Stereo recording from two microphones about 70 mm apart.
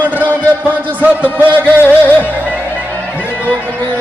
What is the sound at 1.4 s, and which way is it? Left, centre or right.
Speech, right.